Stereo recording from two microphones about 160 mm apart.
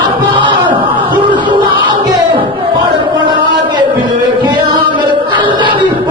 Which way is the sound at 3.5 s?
30° right (ahead or behind).